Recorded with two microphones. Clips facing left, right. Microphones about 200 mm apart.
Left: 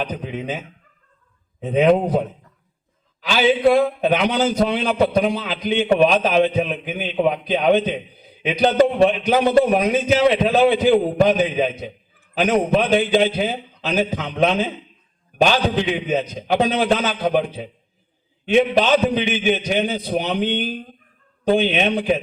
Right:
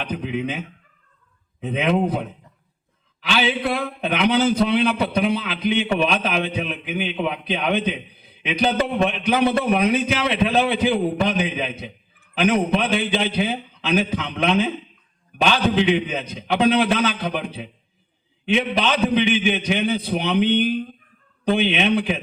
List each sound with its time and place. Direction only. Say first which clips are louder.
0.0 s a man's voice: right 1 dB; 45° left (ahead or behind)
1.6 s a man's voice: left 5 dB; 40° left (ahead or behind)